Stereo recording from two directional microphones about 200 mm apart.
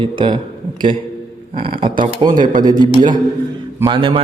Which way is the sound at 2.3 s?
40° right (ahead or behind).